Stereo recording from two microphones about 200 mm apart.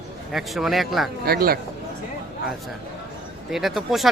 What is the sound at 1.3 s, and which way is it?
Speech, 50° right (ahead or behind).